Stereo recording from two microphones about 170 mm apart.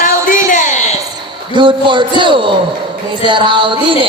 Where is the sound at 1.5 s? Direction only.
30° right (ahead or behind).